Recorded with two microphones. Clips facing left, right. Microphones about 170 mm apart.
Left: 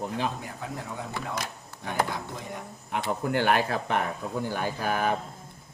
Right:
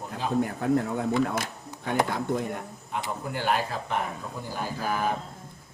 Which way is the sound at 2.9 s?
65° left (ahead or behind).